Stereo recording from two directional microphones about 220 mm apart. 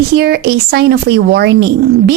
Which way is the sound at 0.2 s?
45° right (ahead or behind).